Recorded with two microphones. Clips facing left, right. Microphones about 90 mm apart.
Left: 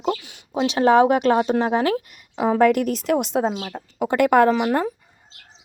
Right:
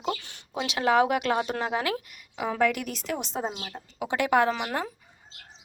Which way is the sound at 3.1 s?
70° left (ahead or behind).